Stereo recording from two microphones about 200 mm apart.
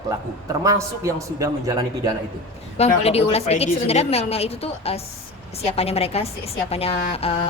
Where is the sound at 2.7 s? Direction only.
30° left (ahead or behind).